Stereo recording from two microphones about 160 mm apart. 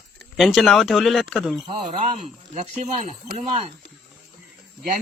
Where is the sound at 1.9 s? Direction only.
45° right (ahead or behind).